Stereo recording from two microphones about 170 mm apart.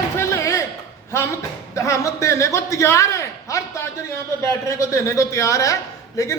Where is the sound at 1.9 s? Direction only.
15° left (ahead or behind).